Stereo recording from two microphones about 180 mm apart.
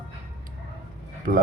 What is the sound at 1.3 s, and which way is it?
Speech, 50° right (ahead or behind).